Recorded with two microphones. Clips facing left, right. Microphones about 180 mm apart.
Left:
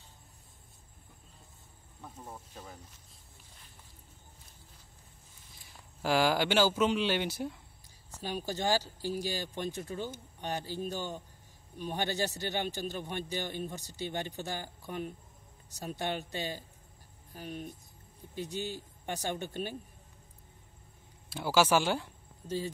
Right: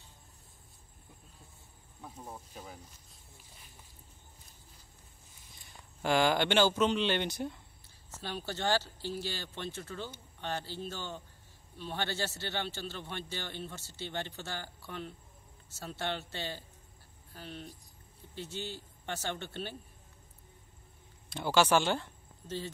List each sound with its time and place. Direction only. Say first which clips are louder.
2.0 s cricket: right 1 dB; 5° right (ahead or behind)
5.7 s a man's voice: even; 5° left (ahead or behind)
21.3 s speech: even; 5° left (ahead or behind)